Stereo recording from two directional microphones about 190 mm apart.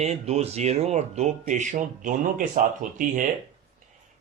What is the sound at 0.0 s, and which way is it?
Speech, 35° right (ahead or behind).